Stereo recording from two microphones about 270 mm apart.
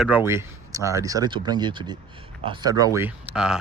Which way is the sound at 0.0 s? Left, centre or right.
Centre.